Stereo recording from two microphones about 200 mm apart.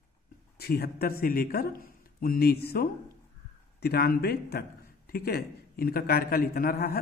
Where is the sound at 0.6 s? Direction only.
50° left (ahead or behind).